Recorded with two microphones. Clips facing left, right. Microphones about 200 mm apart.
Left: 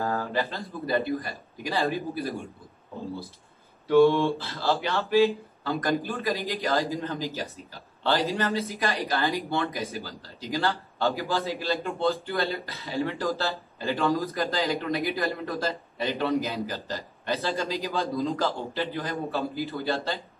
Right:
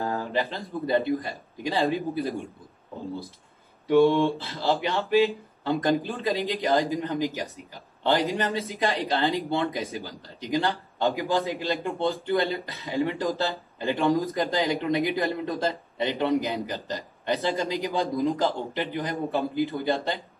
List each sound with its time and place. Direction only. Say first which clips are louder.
0.0 s speech: even; 15° right (ahead or behind)
3.8 s speech: even; 15° right (ahead or behind)